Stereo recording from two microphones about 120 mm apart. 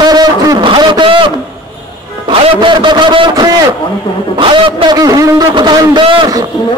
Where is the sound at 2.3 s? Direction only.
50° right (ahead or behind); by 5.6 s 30° right (ahead or behind).